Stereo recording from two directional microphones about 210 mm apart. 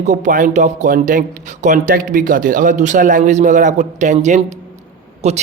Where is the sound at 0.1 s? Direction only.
35° right (ahead or behind).